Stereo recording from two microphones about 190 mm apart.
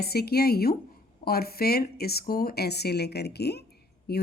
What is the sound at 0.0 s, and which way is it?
A woman's voice, 55° left (ahead or behind).